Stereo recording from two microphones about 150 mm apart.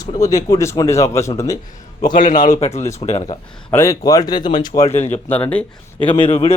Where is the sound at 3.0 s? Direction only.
45° left (ahead or behind).